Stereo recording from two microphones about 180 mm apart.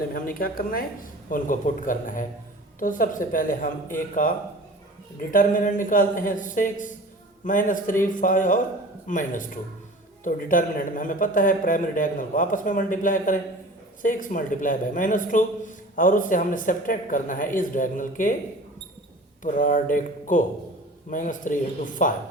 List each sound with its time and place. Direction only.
0.1 s speech: 55° left (ahead or behind)
19.4 s speech: 45° left (ahead or behind)